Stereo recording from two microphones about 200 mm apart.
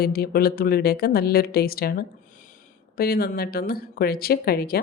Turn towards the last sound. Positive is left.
turn(degrees=50)  # may be behind; listen again after turning